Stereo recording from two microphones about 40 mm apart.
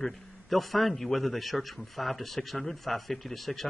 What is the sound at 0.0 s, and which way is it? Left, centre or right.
A man's voice, centre.